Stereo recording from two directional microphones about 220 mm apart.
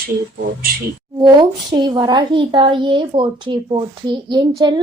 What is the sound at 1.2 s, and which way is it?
A woman's voice, 20° right (ahead or behind).